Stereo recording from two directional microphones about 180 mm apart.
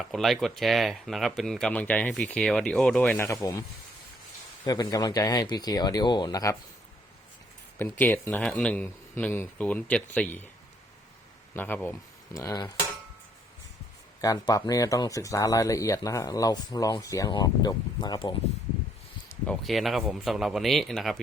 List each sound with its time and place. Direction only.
0.0 s speech: centre (ahead or behind); by 3.6 s 15° left (ahead or behind)
4.6 s speech: 20° left (ahead or behind)
7.8 s speech: 10° left (ahead or behind)
11.5 s speech: 10° left (ahead or behind)
14.2 s speech: 20° left (ahead or behind)
19.3 s speech: 5° left (ahead or behind)